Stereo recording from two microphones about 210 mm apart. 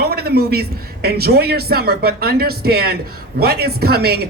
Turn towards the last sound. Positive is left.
turn(degrees=-50)  # may be behind; listen again after turning